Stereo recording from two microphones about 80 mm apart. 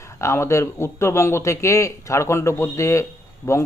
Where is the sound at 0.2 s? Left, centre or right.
Left.